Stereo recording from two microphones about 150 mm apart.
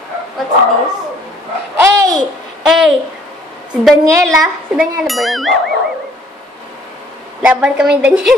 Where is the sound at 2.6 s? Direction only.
5° right (ahead or behind).